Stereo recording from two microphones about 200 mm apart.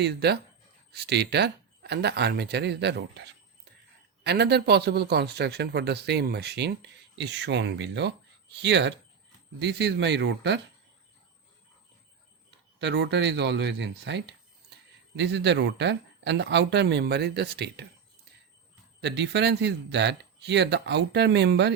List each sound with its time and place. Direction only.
0.0 s a man's voice: 55° right (ahead or behind)
12.5 s a man's voice: 60° right (ahead or behind)
19.0 s a man's voice: 60° right (ahead or behind)